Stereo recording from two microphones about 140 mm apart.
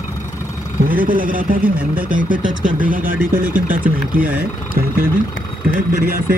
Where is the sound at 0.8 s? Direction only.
90° right.